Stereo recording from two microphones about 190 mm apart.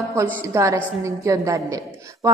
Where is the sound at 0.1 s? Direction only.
15° right (ahead or behind).